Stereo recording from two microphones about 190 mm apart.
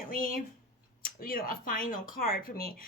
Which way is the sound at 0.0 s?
45° left (ahead or behind).